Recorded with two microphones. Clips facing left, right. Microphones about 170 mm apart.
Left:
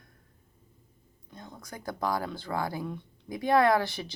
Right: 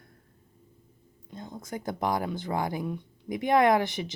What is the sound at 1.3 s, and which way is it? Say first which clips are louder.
Speech: right 7 dB; 25° right (ahead or behind).